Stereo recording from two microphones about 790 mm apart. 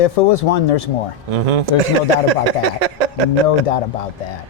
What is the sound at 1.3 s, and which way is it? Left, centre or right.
Speech, right.